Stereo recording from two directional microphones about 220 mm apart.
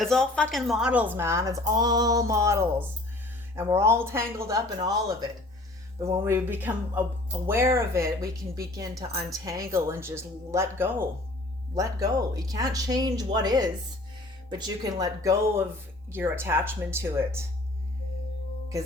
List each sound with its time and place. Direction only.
0.0 s speech: centre (ahead or behind); by 4.9 s 15° right (ahead or behind)
6.0 s speech: 10° right (ahead or behind)
14.9 s speech: 15° right (ahead or behind)